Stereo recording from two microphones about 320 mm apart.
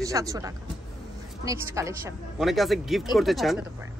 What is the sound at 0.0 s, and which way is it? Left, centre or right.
A woman's voice, centre.